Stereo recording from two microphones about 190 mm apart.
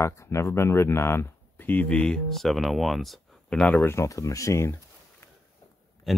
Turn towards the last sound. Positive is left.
turn(degrees=0)  # may be behind; listen again after turning